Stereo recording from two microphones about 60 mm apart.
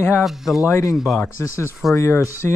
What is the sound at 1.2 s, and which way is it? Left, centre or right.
Speech, left.